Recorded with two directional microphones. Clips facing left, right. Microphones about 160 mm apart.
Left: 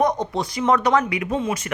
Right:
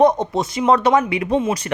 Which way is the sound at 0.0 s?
25° right (ahead or behind).